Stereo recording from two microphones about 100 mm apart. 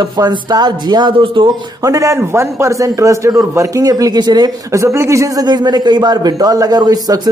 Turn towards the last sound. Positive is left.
turn(degrees=-40)  # may be behind; listen again after turning